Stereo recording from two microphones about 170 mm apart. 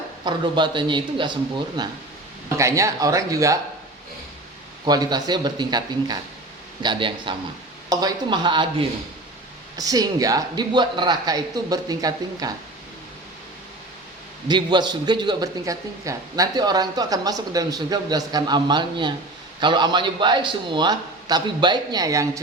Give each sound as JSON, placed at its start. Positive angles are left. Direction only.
{"t": 0.3, "sound": "a man's voice", "side_deg": -25}
{"t": 4.9, "sound": "a man's voice", "side_deg": -25}
{"t": 14.4, "sound": "a man's voice", "side_deg": -25}